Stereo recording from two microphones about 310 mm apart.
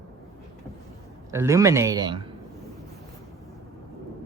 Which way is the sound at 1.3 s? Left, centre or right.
Centre.